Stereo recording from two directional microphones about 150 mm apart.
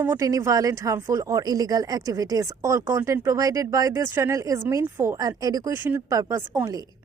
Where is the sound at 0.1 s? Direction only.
20° right (ahead or behind).